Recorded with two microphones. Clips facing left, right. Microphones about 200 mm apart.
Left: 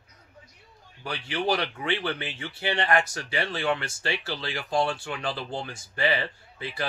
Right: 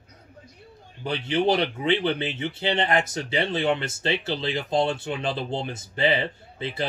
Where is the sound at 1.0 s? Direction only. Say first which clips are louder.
Right 5 dB; 20° right (ahead or behind).